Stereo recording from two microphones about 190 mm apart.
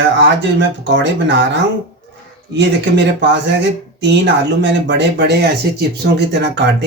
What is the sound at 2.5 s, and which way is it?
Speech, 70° right (ahead or behind).